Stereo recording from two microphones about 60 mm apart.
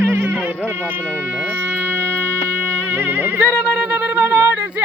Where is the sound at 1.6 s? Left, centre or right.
Right.